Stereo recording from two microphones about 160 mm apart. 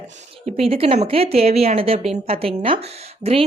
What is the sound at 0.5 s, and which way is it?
A woman's voice, 35° right (ahead or behind).